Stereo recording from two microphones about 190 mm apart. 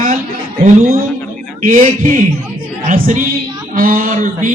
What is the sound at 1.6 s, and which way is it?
Speech, 45° right (ahead or behind).